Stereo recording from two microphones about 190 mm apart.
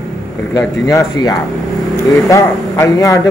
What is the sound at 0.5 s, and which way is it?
A man's voice, 20° left (ahead or behind).